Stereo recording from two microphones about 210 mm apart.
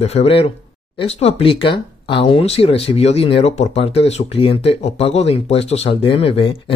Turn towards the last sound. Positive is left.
turn(degrees=25)  # may be behind; listen again after turning